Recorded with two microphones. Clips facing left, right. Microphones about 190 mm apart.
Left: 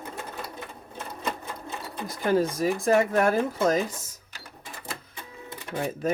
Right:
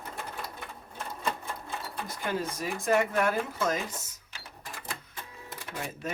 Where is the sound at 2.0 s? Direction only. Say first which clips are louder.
Left 10 dB; 35° left (ahead or behind).